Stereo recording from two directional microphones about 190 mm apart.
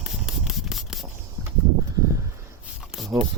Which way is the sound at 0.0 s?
5° right (ahead or behind).